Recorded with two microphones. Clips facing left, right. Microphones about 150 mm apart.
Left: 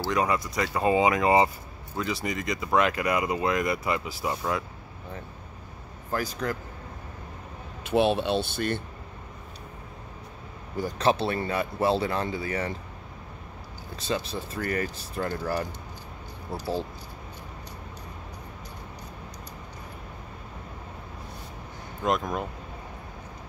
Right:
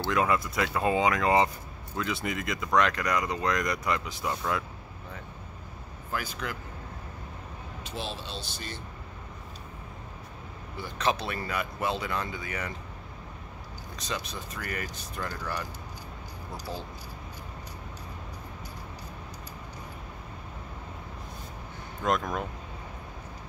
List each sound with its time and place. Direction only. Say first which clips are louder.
0.0 s speech: left 1 dB; centre (ahead or behind)
6.1 s speech: left 5 dB; 40° left (ahead or behind)
7.8 s speech: left 15 dB; 60° left (ahead or behind)
10.8 s speech: left 5 dB; 35° left (ahead or behind)
13.9 s speech: left 6 dB; 30° left (ahead or behind)
22.0 s speech: left 1 dB; centre (ahead or behind)